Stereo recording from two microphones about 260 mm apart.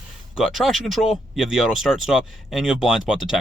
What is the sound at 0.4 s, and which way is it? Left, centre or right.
Speech, centre.